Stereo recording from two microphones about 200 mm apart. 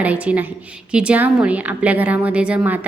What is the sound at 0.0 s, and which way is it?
A woman's voice, 5° right (ahead or behind).